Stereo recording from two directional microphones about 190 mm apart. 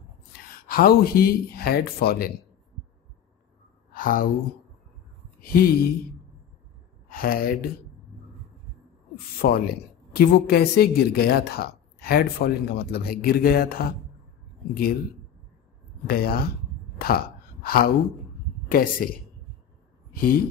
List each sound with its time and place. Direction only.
0.5 s speech: 50° left (ahead or behind)
3.9 s speech: 45° left (ahead or behind)
5.4 s speech: 50° left (ahead or behind)
7.1 s speech: 50° left (ahead or behind)
9.1 s speech: 50° left (ahead or behind)
16.1 s speech: 55° left (ahead or behind)
20.1 s speech: 50° left (ahead or behind)